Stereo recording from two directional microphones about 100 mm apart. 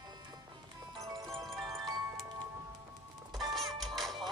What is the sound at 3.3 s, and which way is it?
Music, centre (ahead or behind).